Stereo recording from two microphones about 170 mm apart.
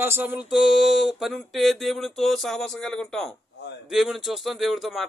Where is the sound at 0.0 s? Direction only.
10° right (ahead or behind).